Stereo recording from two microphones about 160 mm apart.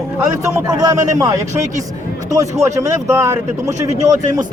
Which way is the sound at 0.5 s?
25° right (ahead or behind).